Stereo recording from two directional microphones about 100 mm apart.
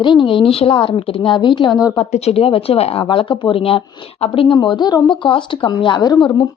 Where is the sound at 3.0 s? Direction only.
55° left (ahead or behind).